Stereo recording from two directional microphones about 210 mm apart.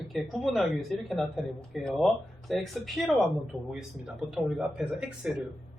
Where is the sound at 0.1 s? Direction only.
Centre (ahead or behind).